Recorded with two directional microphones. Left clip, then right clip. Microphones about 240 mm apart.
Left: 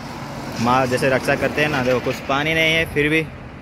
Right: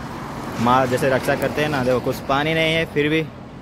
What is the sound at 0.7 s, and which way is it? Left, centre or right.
Speech, centre.